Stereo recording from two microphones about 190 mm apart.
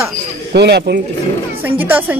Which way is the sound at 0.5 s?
60° right (ahead or behind).